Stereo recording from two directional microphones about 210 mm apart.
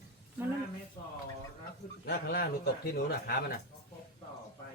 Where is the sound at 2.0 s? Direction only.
50° left (ahead or behind).